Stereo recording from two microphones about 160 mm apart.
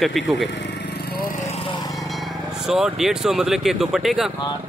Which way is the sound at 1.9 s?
Centre (ahead or behind).